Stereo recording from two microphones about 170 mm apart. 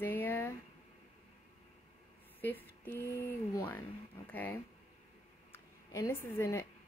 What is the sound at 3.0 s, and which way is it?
A woman's voice, 15° left (ahead or behind).